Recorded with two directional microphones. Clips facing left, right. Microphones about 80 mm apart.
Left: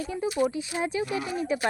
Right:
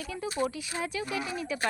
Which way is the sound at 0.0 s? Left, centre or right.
Left.